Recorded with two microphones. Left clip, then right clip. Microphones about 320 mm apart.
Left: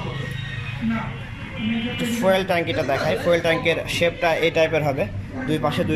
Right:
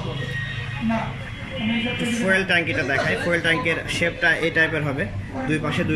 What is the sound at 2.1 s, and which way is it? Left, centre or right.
Speech, centre.